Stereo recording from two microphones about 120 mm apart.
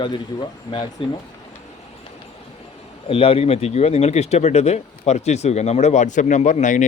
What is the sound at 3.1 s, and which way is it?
Speech, 50° left (ahead or behind).